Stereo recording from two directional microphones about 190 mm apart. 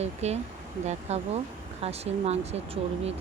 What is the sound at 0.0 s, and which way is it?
Speech, 35° right (ahead or behind).